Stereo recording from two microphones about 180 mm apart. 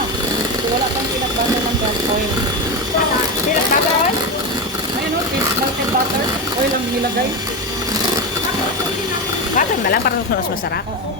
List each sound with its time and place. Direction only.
9.6 s vehicle: 55° left (ahead or behind)